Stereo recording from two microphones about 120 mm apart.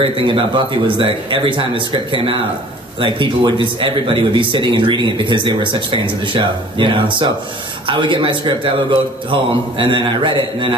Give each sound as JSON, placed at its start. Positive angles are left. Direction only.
{"t": 0.0, "sound": "speech", "side_deg": -45}